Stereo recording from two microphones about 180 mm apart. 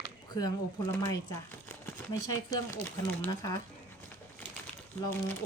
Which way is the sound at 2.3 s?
15° left (ahead or behind).